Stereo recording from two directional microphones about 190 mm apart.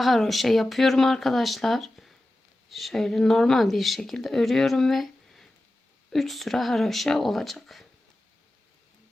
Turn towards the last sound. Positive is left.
turn(degrees=0)  # may be behind; listen again after turning